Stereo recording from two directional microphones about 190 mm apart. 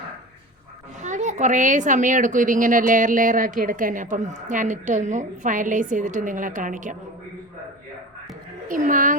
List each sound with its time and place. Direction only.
1.0 s a woman's voice: 40° right (ahead or behind)
8.6 s a woman's voice: 45° right (ahead or behind)